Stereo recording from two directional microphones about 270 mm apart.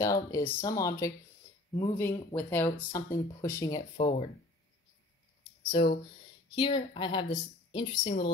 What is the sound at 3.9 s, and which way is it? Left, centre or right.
Speech, left.